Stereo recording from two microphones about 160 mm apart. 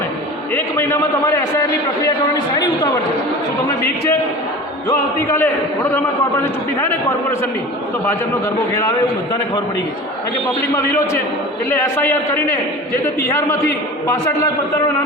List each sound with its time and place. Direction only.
0.5 s a man's voice: 15° left (ahead or behind)
4.9 s a man's voice: 15° left (ahead or behind)
10.8 s a man's voice: 15° left (ahead or behind)
13.1 s a man's voice: 15° left (ahead or behind)